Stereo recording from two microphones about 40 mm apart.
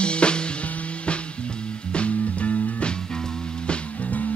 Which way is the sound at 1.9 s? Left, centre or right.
Left.